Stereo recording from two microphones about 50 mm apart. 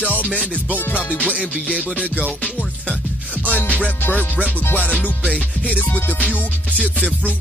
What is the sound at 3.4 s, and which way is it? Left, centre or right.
Music, left.